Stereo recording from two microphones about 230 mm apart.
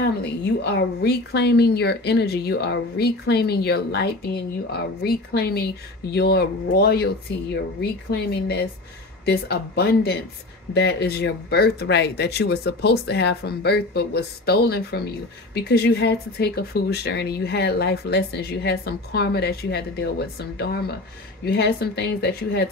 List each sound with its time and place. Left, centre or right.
0.2 s speech: left